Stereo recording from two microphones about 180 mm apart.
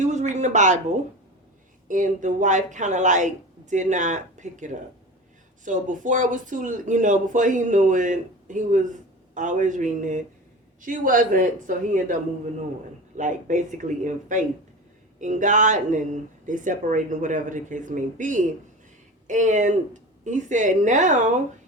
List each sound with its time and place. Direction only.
0.0 s a sound: 40° right (ahead or behind)
1.9 s speech: 45° right (ahead or behind)
13.1 s speech: 45° right (ahead or behind)